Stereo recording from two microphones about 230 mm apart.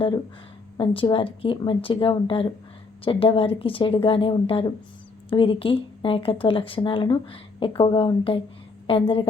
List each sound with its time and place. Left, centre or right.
0.8 s speech: left